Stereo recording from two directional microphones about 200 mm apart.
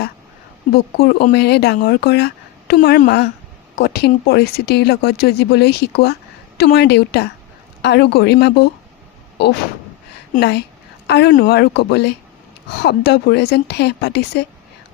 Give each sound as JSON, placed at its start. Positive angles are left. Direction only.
{"t": 0.9, "sound": "speech", "side_deg": 50}
{"t": 10.3, "sound": "a woman's voice", "side_deg": 55}